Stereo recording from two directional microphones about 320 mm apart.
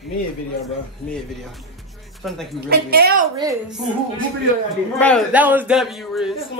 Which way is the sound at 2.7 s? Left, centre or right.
Right.